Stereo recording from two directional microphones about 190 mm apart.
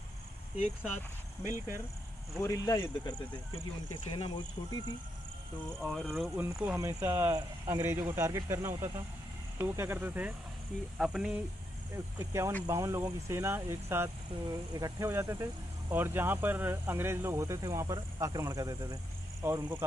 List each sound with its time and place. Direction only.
1.5 s speech: 15° right (ahead or behind)
2.4 s speech: 15° left (ahead or behind)
5.8 s speech: centre (ahead or behind)
6.2 s speech: 10° right (ahead or behind)